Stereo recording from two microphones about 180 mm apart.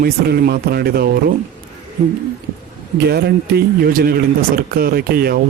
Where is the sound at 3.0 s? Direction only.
65° right (ahead or behind).